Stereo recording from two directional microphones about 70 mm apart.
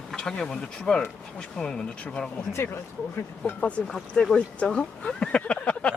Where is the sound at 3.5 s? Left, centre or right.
Centre.